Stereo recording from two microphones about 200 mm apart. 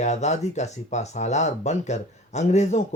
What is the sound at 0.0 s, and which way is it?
Speech, 35° left (ahead or behind).